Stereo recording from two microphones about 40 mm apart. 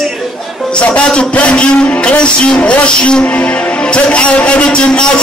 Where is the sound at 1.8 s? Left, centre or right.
Left.